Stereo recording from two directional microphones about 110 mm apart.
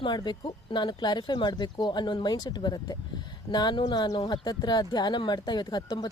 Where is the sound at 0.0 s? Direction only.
40° left (ahead or behind).